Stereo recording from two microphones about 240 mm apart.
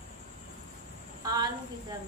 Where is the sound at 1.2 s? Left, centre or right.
Centre.